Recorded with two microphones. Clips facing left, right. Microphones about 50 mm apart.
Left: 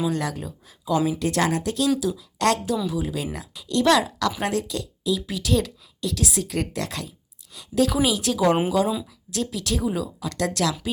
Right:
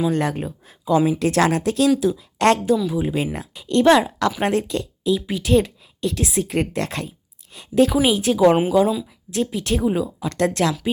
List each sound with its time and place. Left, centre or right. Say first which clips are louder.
0.1 s speech: right 5 dB; right